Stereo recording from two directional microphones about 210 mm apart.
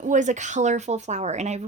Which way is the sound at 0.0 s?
35° right (ahead or behind).